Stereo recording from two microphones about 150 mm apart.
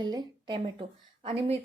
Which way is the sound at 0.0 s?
30° right (ahead or behind).